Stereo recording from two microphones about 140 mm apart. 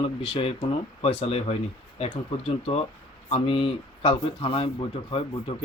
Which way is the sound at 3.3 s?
40° left (ahead or behind).